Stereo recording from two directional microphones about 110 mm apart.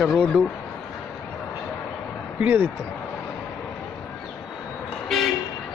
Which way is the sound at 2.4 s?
20° right (ahead or behind).